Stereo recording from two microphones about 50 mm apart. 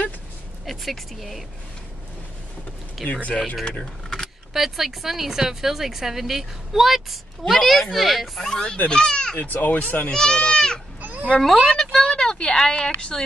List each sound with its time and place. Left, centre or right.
0.7 s a woman's voice: centre
3.0 s a woman's voice: centre
3.6 s speech: centre
4.6 s a woman's voice: centre
9.4 s speech: left
10.1 s speech: centre
11.0 s a sound: right
11.4 s a woman's voice: centre
11.7 s a sound: centre
12.1 s a sound: centre